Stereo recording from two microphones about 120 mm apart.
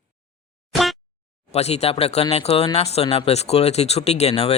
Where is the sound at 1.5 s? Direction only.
60° left (ahead or behind).